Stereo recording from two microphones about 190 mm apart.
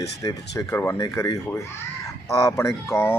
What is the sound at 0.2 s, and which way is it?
Speech, 15° left (ahead or behind).